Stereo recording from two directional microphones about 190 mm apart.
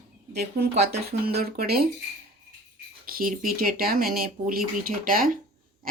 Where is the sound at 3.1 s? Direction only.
50° right (ahead or behind).